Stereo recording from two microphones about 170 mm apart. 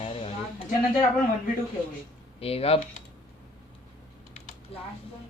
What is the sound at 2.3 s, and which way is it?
Speech, 35° left (ahead or behind).